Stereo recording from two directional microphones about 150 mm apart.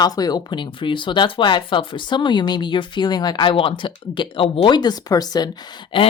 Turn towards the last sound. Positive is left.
turn(degrees=35)  # may be behind; listen again after turning